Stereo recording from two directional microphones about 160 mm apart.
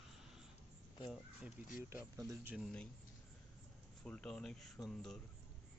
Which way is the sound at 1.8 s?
20° right (ahead or behind).